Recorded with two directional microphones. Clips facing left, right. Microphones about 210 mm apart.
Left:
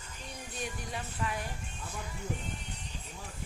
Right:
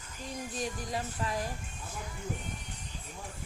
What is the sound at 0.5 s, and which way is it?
Music, 35° right (ahead or behind).